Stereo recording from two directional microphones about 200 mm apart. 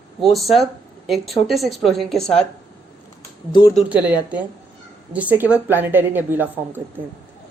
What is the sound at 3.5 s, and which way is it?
Speech, 25° left (ahead or behind).